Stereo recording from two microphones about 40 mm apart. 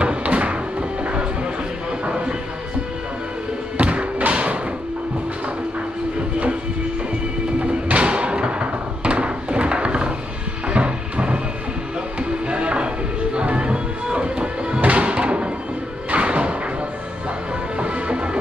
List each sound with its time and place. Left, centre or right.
0.0 s music: right
2.0 s a sound: right
3.7 s music: right
7.6 s music: right
17.7 s music: right